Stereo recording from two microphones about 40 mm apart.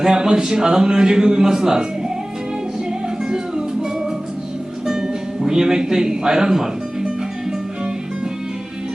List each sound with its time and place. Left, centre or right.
0.0 s a man's voice: centre
3.2 s music: centre
4.9 s music: centre